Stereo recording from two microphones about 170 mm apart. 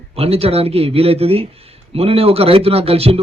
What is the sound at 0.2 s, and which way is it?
A man's voice, 35° right (ahead or behind).